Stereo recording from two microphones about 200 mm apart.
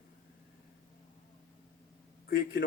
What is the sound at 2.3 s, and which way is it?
Speech, 45° left (ahead or behind).